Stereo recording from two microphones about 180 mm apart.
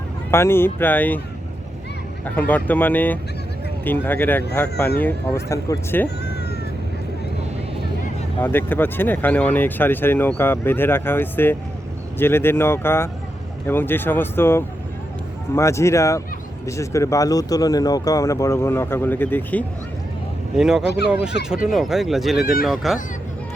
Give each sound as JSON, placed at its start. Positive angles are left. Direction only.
{"t": 0.3, "sound": "speech", "side_deg": 15}
{"t": 2.2, "sound": "speech", "side_deg": 10}
{"t": 8.4, "sound": "speech", "side_deg": 10}
{"t": 20.6, "sound": "speech", "side_deg": -5}